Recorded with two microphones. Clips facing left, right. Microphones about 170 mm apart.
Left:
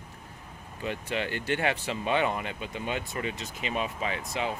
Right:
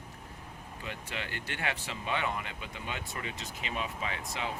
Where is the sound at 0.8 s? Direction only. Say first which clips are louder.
Left 9 dB; 25° left (ahead or behind).